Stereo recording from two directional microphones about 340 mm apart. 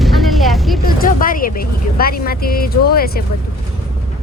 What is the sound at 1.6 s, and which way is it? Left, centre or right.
Vehicle, left.